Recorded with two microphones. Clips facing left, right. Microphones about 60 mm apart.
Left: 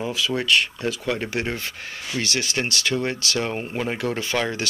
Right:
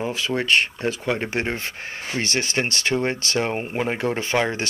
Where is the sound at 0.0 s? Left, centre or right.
Right.